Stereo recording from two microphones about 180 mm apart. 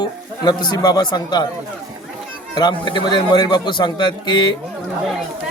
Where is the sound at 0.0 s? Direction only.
25° left (ahead or behind).